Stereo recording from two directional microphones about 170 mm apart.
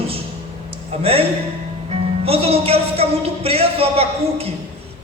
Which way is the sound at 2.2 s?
35° right (ahead or behind).